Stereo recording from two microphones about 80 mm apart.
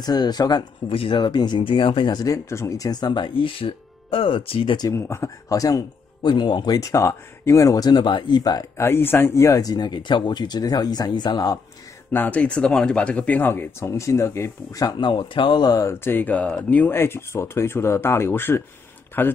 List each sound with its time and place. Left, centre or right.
0.0 s speech: left
2.2 s speech: left
2.9 s speech: left
4.9 s speech: left
6.2 s speech: left
6.8 s speech: left
8.7 s speech: left
9.6 s speech: left
12.1 s speech: left
14.8 s speech: left
15.0 s speech: left
15.9 s speech: left